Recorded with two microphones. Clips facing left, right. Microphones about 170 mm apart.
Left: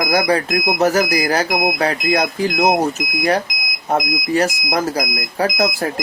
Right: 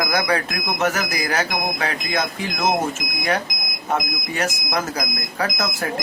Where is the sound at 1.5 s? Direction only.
15° left (ahead or behind).